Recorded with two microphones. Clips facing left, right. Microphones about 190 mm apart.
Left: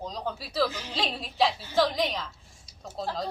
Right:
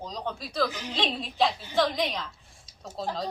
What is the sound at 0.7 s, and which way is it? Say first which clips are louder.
Speech: right 2 dB; 15° right (ahead or behind).